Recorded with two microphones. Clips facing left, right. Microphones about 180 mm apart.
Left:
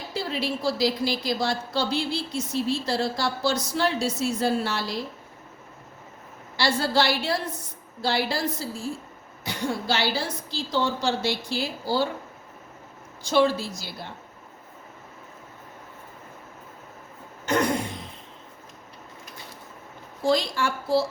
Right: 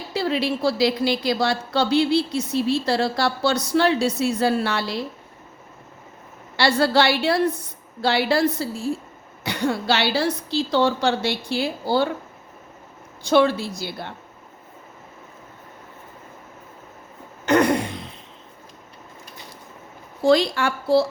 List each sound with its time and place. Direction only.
0.1 s a woman's voice: 70° right (ahead or behind)
6.6 s a woman's voice: 65° right (ahead or behind)
13.2 s a woman's voice: 60° right (ahead or behind)
17.4 s throat clearing: 65° right (ahead or behind)
20.2 s a woman's voice: 70° right (ahead or behind)